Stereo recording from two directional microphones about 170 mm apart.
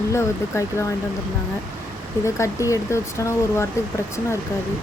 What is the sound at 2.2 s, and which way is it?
Speech, 15° left (ahead or behind).